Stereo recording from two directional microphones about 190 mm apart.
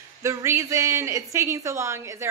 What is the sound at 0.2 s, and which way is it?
A woman's voice, 15° right (ahead or behind).